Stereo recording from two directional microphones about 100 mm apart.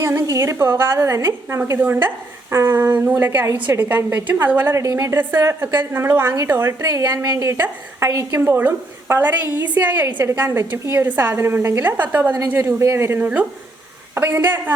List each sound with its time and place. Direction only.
0.0 s a woman's voice: 25° right (ahead or behind)